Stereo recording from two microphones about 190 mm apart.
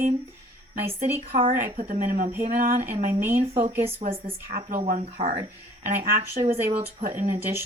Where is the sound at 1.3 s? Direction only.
30° right (ahead or behind).